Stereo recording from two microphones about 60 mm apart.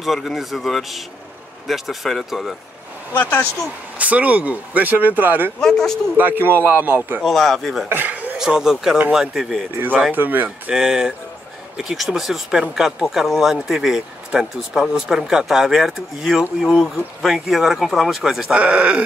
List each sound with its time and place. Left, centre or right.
0.0 s speech: centre
3.1 s speech: left
4.0 s speech: right
5.6 s speech: centre
6.1 s speech: right
7.2 s speech: centre
7.9 s a sound: right
8.4 s speech: centre
10.1 s speech: right
10.7 s speech: centre
18.6 s speech: centre